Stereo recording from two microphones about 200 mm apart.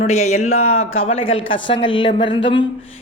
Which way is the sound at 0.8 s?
90° left.